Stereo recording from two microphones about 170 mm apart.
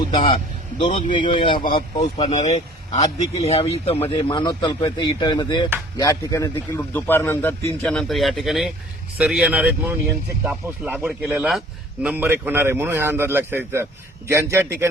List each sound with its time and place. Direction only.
0.1 s speech: 30° left (ahead or behind)
0.8 s a man's voice: 40° left (ahead or behind)
1.1 s speech: 30° left (ahead or behind)
2.0 s a man's voice: 40° left (ahead or behind); by 14.8 s 15° right (ahead or behind)